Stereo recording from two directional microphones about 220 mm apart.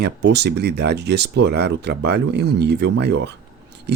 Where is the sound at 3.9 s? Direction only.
50° right (ahead or behind).